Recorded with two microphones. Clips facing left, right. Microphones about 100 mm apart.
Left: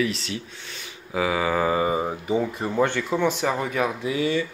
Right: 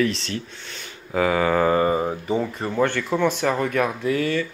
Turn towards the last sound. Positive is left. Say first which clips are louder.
# right 1 dB
turn(degrees=15)  # may be behind; listen again after turning